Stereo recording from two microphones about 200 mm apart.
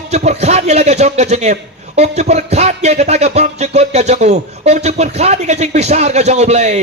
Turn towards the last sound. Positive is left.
turn(degrees=-35)  # may be behind; listen again after turning